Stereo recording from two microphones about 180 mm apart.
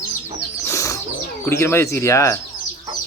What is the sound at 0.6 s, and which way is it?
Bird, 15° left (ahead or behind).